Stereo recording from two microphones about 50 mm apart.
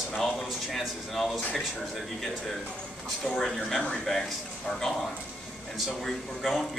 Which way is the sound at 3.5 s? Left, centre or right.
Centre.